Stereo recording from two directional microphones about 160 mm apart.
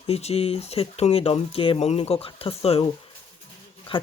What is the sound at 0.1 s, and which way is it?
Speech, 40° left (ahead or behind).